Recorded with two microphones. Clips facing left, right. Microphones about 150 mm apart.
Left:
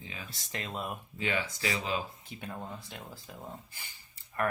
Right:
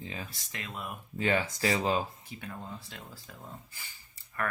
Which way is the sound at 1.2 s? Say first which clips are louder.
Right 5 dB; 45° right (ahead or behind).